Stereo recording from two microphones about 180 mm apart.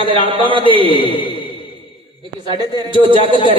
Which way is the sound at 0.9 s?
30° left (ahead or behind).